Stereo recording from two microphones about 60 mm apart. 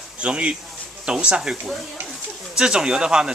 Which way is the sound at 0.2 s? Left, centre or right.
Centre.